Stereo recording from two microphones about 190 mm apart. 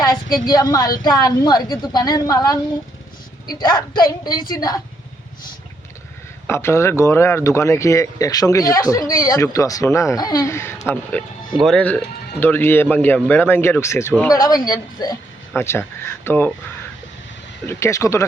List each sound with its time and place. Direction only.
0.4 s a woman's voice: 20° left (ahead or behind)
3.6 s a woman's voice: 20° left (ahead or behind)
4.3 s a woman's voice: 50° left (ahead or behind)
6.5 s a woman's voice: 15° left (ahead or behind)
17.7 s speech: 15° left (ahead or behind)